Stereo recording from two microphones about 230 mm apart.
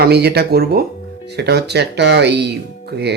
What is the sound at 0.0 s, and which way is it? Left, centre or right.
Speech, right.